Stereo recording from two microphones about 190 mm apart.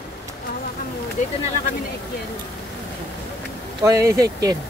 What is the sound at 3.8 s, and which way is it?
Speech, 15° right (ahead or behind).